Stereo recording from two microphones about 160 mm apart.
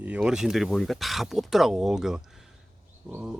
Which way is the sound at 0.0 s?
5° right (ahead or behind).